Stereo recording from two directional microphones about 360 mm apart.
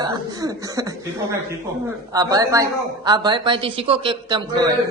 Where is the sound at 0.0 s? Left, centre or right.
Centre.